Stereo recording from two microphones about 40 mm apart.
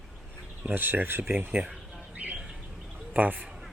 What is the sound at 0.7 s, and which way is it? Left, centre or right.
Speech, right.